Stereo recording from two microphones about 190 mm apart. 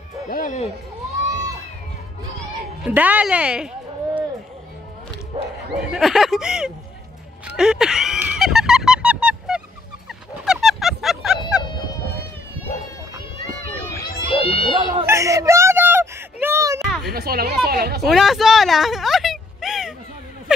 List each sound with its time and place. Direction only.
0.3 s speech: 45° left (ahead or behind)
2.8 s a woman's voice: 10° right (ahead or behind)
5.8 s speech: 5° right (ahead or behind)
7.4 s a sound: 5° right (ahead or behind)
10.0 s music: centre (ahead or behind)
14.3 s children playing: 30° left (ahead or behind)
15.0 s a sound: 15° right (ahead or behind)
16.8 s children playing: centre (ahead or behind)
17.1 s speech: 55° right (ahead or behind)
18.0 s speech: centre (ahead or behind)